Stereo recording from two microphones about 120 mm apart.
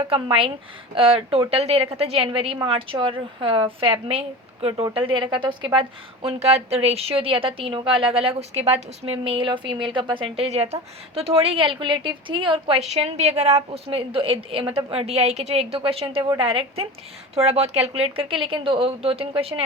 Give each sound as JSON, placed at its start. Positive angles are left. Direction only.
{"t": 0.1, "sound": "a woman's voice", "side_deg": -50}
{"t": 6.2, "sound": "a woman's voice", "side_deg": -60}